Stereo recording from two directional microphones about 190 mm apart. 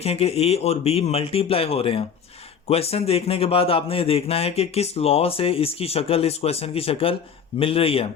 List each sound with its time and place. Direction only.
0.0 s a man's voice: 30° left (ahead or behind)